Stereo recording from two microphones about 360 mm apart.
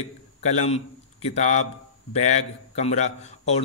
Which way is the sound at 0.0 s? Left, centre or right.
Centre.